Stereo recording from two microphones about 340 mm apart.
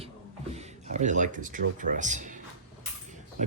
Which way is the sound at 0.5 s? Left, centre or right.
Centre.